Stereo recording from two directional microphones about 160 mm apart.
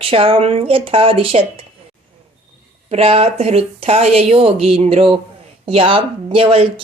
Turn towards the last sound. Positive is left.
turn(degrees=-35)  # may be behind; listen again after turning